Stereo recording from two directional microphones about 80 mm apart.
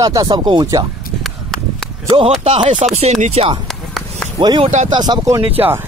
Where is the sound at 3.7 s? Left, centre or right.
Centre.